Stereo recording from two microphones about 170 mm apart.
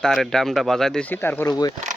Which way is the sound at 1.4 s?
20° left (ahead or behind).